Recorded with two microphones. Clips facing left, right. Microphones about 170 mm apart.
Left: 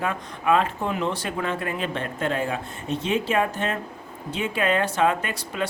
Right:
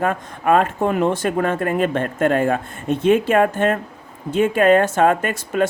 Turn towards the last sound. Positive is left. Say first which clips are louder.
# right 8 dB
turn(degrees=-50)  # may be behind; listen again after turning